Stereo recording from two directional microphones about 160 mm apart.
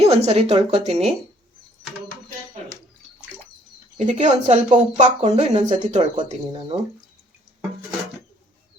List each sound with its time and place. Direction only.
0.0 s speech: 40° right (ahead or behind)
3.9 s speech: 45° right (ahead or behind)